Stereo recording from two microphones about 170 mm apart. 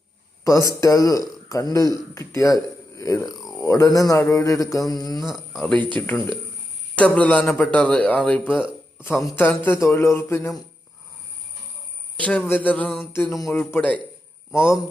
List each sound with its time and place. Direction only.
0.4 s speech: 20° left (ahead or behind)
5.2 s a man's voice: centre (ahead or behind); by 10.5 s 15° left (ahead or behind)
12.1 s a man's voice: 5° left (ahead or behind)
13.1 s a man's voice: 15° left (ahead or behind)